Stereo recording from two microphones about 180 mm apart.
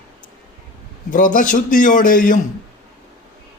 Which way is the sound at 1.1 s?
50° left (ahead or behind).